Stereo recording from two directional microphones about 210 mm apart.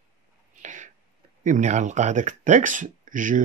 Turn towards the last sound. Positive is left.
turn(degrees=-40)  # may be behind; listen again after turning